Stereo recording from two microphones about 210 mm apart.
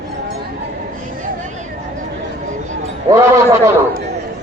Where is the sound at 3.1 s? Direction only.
15° right (ahead or behind).